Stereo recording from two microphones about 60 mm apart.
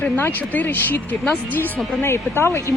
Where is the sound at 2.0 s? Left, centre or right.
Left.